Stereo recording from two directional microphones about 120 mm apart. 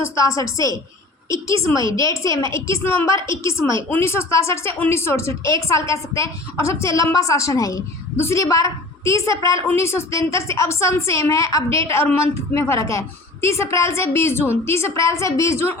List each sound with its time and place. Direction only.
0.2 s a woman's voice: 25° left (ahead or behind)